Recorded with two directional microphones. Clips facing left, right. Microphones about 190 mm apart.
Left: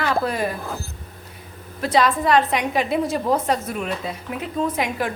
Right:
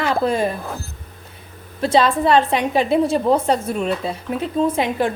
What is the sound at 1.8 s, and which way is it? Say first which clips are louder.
A woman's voice: right 3 dB; 30° right (ahead or behind).